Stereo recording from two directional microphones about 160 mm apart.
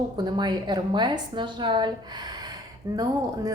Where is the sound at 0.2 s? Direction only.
25° right (ahead or behind).